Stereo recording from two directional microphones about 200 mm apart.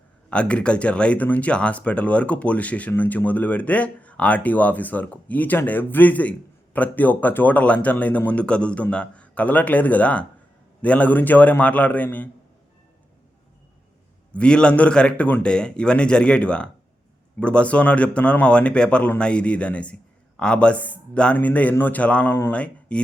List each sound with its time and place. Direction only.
0.3 s speech: 5° left (ahead or behind)
14.3 s a man's voice: 5° left (ahead or behind)